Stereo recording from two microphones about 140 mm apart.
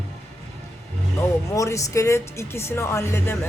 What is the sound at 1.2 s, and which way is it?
Speech, 20° left (ahead or behind).